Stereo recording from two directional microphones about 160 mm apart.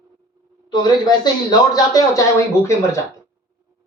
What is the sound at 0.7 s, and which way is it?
A man's voice, 25° left (ahead or behind).